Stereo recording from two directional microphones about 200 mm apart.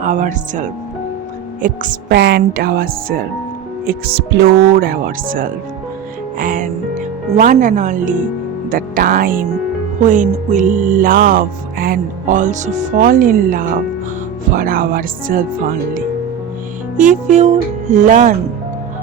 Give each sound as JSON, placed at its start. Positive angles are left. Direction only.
{"t": 0.0, "sound": "music", "side_deg": -40}
{"t": 1.6, "sound": "a woman's voice", "side_deg": -45}
{"t": 10.0, "sound": "music", "side_deg": -40}
{"t": 14.5, "sound": "speech", "side_deg": -45}
{"t": 17.0, "sound": "music", "side_deg": -40}